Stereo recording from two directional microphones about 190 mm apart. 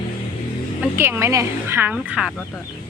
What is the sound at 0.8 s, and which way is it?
A woman's voice, 10° right (ahead or behind).